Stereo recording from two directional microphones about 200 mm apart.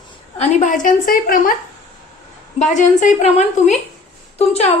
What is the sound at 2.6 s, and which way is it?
A woman's voice, 35° left (ahead or behind).